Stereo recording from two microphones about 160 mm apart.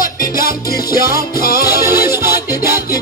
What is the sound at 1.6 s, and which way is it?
Music, 15° right (ahead or behind).